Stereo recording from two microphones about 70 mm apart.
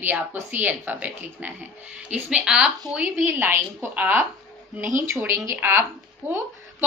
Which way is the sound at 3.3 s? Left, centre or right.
Right.